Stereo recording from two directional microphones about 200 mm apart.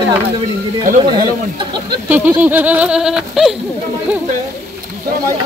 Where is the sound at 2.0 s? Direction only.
10° right (ahead or behind).